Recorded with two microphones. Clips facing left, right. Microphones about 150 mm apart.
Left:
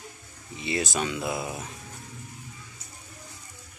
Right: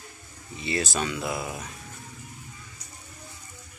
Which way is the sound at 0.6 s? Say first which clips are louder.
Even; 20° left (ahead or behind).